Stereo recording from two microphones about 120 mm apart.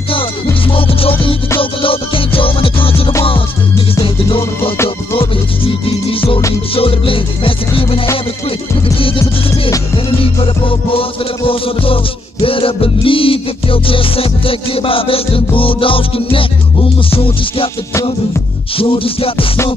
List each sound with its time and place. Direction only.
0.1 s music: 50° left (ahead or behind)
5.7 s music: 50° left (ahead or behind)
10.0 s music: 50° left (ahead or behind)
18.8 s music: 50° left (ahead or behind)